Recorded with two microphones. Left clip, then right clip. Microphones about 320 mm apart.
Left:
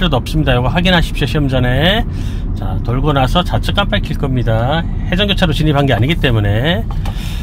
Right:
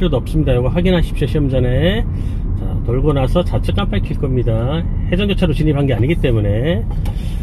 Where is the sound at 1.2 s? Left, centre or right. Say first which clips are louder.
Left 2 dB; left.